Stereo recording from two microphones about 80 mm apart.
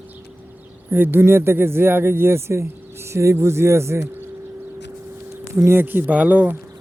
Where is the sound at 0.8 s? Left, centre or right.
Right.